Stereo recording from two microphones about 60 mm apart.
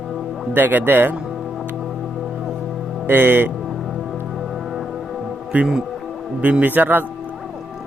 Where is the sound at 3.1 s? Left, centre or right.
Right.